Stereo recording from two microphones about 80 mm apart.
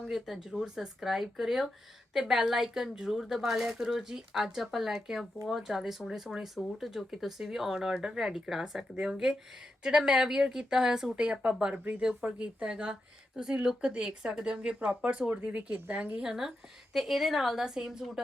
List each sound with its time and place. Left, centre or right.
0.1 s speech: centre
16.9 s speech: centre